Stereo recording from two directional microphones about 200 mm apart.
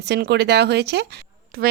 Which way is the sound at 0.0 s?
55° right (ahead or behind).